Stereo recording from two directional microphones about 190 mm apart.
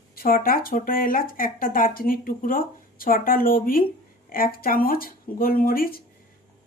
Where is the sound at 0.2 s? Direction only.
50° left (ahead or behind).